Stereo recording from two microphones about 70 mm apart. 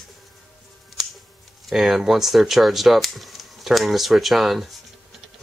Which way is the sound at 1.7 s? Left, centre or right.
Centre.